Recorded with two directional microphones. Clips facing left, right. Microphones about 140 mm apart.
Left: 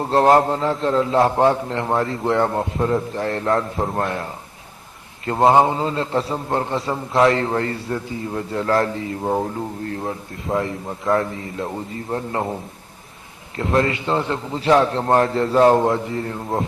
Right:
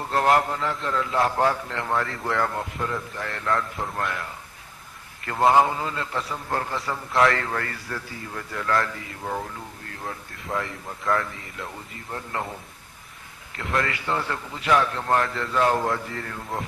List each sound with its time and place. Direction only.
0.0 s a man's voice: 30° left (ahead or behind)
13.6 s a man's voice: 30° left (ahead or behind)